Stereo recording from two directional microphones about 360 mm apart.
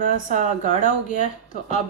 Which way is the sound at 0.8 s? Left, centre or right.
Left.